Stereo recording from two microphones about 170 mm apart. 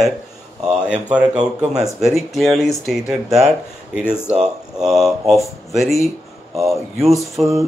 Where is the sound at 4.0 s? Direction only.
10° left (ahead or behind).